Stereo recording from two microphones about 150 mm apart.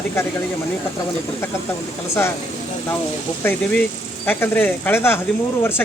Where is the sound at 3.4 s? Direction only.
10° left (ahead or behind).